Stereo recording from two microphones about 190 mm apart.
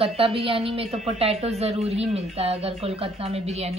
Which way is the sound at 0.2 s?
30° right (ahead or behind).